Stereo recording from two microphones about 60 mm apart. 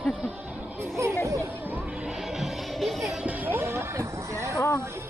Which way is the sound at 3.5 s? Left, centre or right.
Right.